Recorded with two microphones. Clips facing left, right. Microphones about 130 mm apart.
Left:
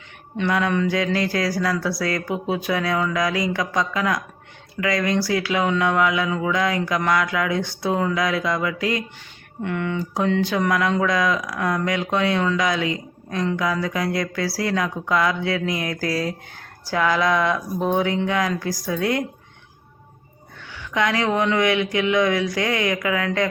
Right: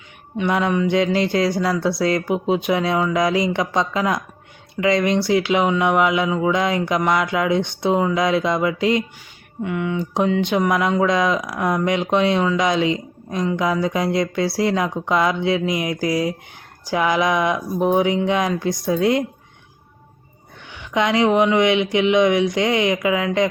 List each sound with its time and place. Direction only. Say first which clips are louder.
0.4 s speech: right 2 dB; 20° right (ahead or behind)
9.6 s speech: right 2 dB; 10° right (ahead or behind)
10.0 s speech: right 2 dB; 20° right (ahead or behind)
20.7 s speech: right 3 dB; 20° right (ahead or behind)